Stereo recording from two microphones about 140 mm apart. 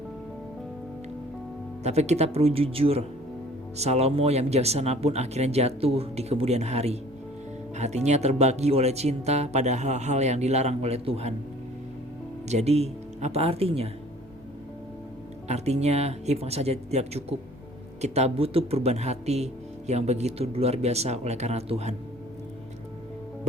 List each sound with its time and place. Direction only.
1.8 s speech: 50° right (ahead or behind)
12.5 s speech: 50° right (ahead or behind)
15.4 s speech: 50° right (ahead or behind)